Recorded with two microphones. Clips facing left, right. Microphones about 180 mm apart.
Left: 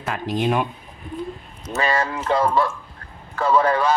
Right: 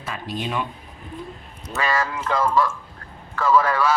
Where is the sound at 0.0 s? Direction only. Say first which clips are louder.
Left 6 dB; 55° left (ahead or behind).